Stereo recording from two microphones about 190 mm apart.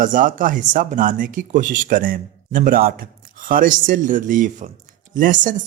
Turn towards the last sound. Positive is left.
turn(degrees=-45)  # may be behind; listen again after turning